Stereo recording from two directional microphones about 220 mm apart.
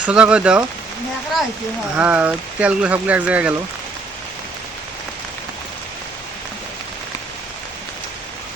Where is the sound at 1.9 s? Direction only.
5° right (ahead or behind).